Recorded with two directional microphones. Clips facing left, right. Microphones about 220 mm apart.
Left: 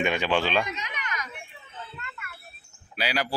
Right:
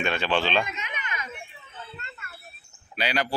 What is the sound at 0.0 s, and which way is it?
Speech, 15° left (ahead or behind).